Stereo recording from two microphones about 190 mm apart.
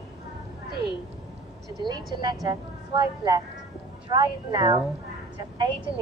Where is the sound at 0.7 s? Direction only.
60° right (ahead or behind).